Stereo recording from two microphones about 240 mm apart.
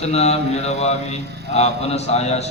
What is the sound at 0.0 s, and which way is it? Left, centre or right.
A man's voice, left.